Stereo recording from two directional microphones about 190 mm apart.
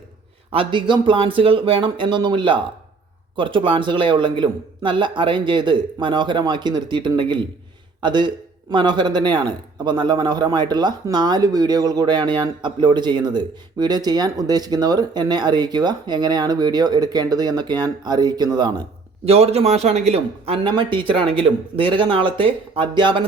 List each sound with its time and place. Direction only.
0.5 s speech: 25° right (ahead or behind)